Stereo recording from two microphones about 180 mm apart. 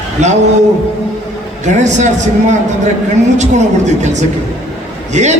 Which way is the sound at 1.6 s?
40° right (ahead or behind).